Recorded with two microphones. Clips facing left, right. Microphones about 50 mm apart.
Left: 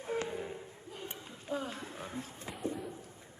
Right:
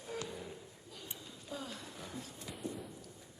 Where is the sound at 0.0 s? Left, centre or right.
Left.